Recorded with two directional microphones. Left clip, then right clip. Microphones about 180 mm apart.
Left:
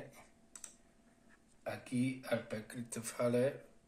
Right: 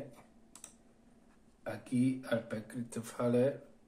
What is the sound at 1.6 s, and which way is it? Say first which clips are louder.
Speech: right 4 dB; 20° left (ahead or behind).